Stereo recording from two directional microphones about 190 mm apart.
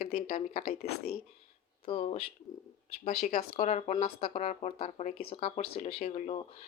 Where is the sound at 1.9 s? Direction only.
30° left (ahead or behind).